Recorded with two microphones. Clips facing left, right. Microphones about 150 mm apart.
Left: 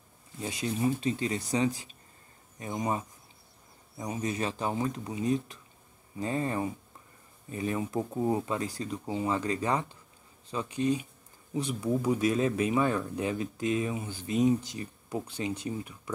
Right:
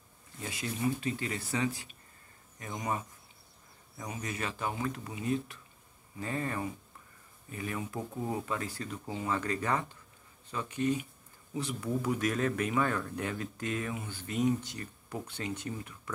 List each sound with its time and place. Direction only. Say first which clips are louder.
0.4 s speech: left 5 dB; 25° left (ahead or behind)